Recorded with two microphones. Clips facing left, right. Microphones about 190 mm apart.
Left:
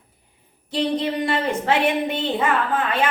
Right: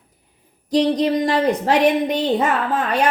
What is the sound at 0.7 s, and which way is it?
A woman's voice, 40° right (ahead or behind).